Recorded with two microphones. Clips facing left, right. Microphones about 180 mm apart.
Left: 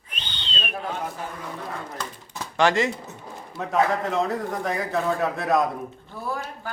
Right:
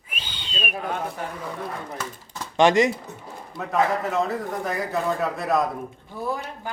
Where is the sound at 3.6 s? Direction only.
Centre (ahead or behind).